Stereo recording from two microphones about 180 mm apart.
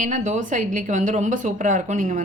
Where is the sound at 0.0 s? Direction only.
45° right (ahead or behind).